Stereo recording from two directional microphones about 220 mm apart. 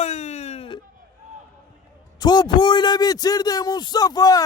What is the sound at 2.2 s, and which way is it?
A man's voice, 20° left (ahead or behind).